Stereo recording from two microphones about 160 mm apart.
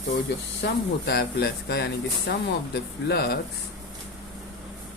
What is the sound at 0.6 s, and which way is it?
Speech, 85° left.